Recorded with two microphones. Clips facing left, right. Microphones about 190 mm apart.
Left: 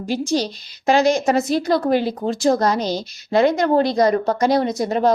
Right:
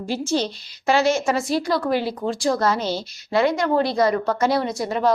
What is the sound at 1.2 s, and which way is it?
Speech, 40° left (ahead or behind).